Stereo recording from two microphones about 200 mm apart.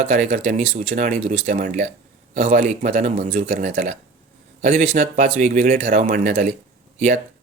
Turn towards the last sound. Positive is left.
turn(degrees=-35)  # may be behind; listen again after turning